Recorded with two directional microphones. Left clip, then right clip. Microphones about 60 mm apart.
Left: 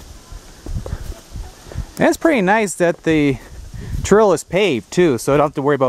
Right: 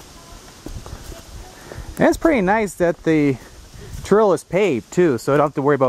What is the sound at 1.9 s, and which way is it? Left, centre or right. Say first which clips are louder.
Speech: left 1 dB; centre.